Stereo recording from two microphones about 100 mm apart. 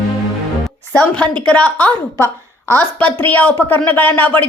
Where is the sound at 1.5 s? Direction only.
10° left (ahead or behind).